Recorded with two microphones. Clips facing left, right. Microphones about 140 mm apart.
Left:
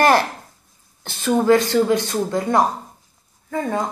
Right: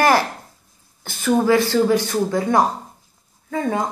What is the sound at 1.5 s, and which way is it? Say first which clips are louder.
Speech: even; 20° left (ahead or behind).